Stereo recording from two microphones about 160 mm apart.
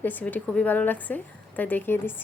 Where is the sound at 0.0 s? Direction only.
10° left (ahead or behind).